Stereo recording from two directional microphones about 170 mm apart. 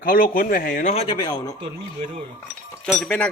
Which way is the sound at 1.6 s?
35° right (ahead or behind).